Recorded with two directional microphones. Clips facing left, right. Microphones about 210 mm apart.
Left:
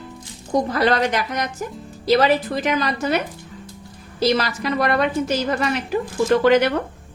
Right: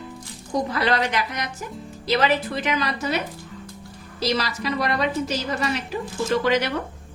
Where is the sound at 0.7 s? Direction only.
45° left (ahead or behind).